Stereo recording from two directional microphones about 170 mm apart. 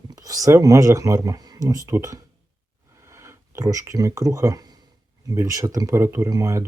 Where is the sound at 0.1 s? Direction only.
20° right (ahead or behind).